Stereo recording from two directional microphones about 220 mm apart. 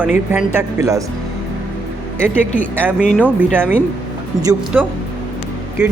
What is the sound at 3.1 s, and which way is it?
Speech, 5° right (ahead or behind).